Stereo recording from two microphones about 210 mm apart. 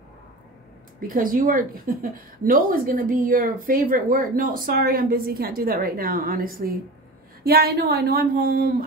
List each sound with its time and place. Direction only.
1.0 s a woman's voice: 40° right (ahead or behind)